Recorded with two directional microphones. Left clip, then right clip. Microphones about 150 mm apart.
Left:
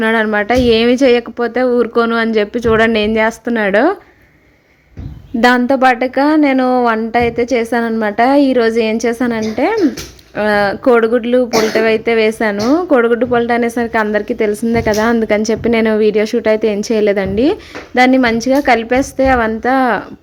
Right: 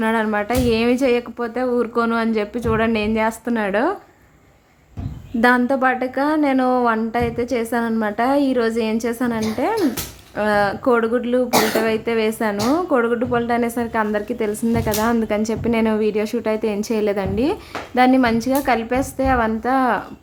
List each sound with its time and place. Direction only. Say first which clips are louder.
0.0 s a woman's voice: left 6 dB; 35° left (ahead or behind)
5.4 s a woman's voice: left 6 dB; 35° left (ahead or behind)